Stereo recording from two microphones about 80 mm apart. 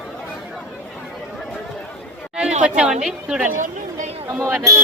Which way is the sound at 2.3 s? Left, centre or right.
Centre.